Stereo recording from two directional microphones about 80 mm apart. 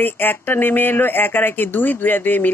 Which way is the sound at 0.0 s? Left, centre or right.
Left.